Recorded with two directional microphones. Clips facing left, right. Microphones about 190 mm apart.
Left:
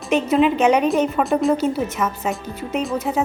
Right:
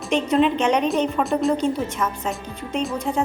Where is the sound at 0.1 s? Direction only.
5° left (ahead or behind).